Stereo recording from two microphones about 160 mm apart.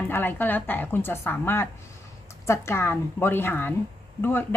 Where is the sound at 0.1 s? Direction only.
10° left (ahead or behind).